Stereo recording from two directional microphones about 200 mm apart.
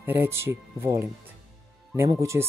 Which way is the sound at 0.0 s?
10° right (ahead or behind).